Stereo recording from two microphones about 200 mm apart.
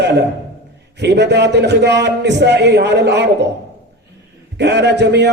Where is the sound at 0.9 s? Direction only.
60° right (ahead or behind).